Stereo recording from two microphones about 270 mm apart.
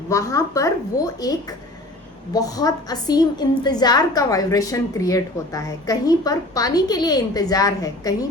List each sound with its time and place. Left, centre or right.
0.1 s a woman's voice: centre